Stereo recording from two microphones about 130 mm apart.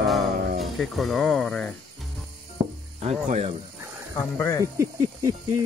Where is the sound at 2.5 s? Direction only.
55° right (ahead or behind).